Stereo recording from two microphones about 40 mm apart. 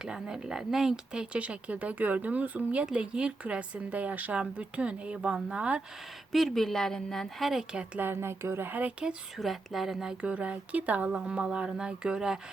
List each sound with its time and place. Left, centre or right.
0.0 s speech: centre
1.1 s speech: right
1.4 s speech: right
2.8 s speech: right
3.8 s speech: right
6.3 s speech: centre
7.3 s speech: centre
7.9 s speech: right
9.0 s speech: right
9.4 s speech: centre
10.2 s speech: right
11.3 s speech: right